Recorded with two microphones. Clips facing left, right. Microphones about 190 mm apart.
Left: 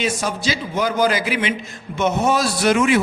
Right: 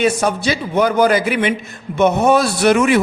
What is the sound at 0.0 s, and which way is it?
A man's voice, 60° right (ahead or behind).